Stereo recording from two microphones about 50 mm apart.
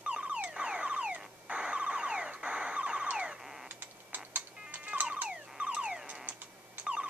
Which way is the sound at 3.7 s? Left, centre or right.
Right.